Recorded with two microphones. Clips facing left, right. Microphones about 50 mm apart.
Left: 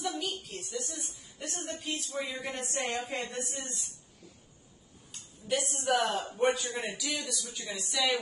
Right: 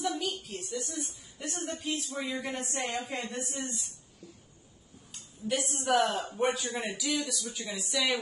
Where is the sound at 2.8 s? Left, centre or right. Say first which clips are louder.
Left 2 dB; left.